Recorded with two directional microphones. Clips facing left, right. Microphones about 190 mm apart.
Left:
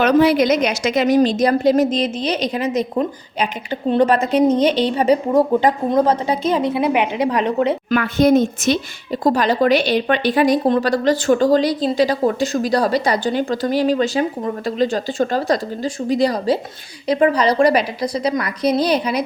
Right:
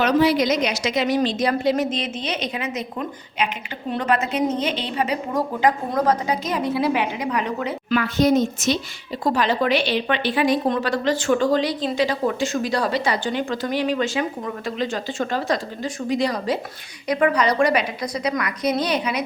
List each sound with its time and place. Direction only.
0.0 s a woman's voice: 55° left (ahead or behind); by 7.7 s 30° left (ahead or behind)
7.9 s a woman's voice: 55° left (ahead or behind)
9.2 s a woman's voice: 40° left (ahead or behind)